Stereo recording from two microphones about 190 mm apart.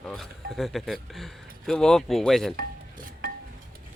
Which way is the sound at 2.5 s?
50° right (ahead or behind).